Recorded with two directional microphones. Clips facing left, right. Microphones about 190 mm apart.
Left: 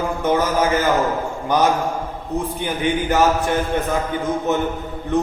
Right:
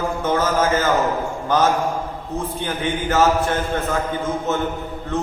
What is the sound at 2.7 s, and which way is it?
A man's voice, 15° left (ahead or behind).